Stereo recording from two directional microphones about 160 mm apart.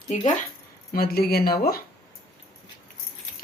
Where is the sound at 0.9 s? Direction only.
70° left (ahead or behind).